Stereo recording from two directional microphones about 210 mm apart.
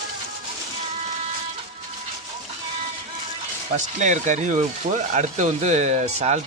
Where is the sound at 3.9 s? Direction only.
35° right (ahead or behind).